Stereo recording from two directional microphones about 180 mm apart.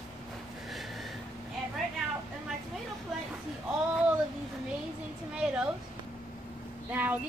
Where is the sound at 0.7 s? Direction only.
Centre (ahead or behind).